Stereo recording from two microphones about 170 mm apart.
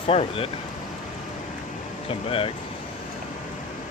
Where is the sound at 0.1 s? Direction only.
35° left (ahead or behind).